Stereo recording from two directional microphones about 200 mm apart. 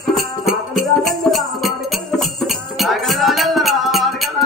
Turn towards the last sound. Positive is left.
turn(degrees=0)  # may be behind; listen again after turning